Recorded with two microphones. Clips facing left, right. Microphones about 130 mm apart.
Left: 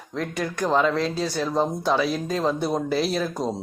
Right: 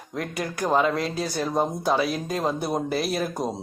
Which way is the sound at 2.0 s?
10° right (ahead or behind).